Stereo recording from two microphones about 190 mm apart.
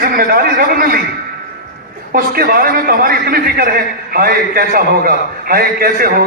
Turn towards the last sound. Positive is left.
turn(degrees=-50)  # may be behind; listen again after turning